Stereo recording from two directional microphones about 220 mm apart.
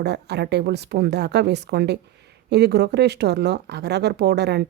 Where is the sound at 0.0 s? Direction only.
50° right (ahead or behind).